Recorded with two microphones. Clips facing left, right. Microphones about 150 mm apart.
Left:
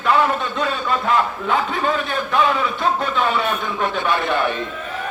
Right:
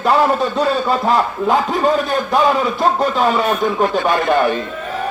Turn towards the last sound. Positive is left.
turn(degrees=-40)  # may be behind; listen again after turning